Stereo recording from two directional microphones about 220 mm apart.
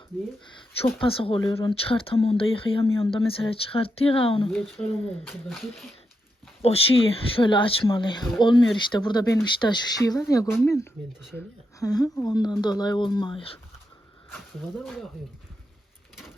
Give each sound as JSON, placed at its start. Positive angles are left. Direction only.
{"t": 0.8, "sound": "speech", "side_deg": 25}
{"t": 4.5, "sound": "speech", "side_deg": 5}
{"t": 7.1, "sound": "speech", "side_deg": 25}
{"t": 14.8, "sound": "speech", "side_deg": 0}